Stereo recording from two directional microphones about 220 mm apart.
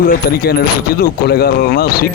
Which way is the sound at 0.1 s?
45° left (ahead or behind).